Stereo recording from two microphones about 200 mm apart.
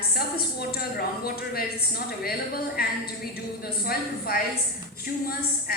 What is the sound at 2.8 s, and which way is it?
Speech, 50° left (ahead or behind).